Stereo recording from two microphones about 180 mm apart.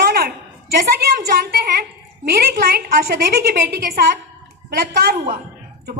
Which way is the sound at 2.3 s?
60° right (ahead or behind).